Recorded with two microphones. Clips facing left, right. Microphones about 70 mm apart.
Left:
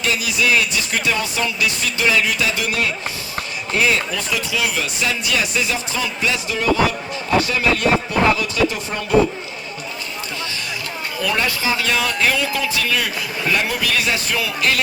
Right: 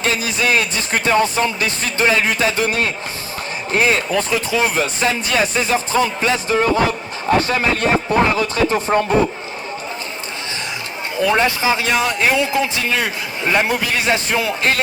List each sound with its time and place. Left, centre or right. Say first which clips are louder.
0.0 s speech: right 1 dB; right
11.2 s speech: right 5 dB; right